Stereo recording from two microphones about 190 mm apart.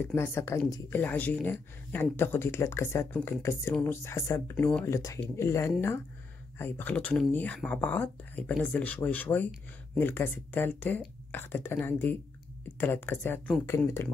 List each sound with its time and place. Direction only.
0.0 s speech: 10° left (ahead or behind)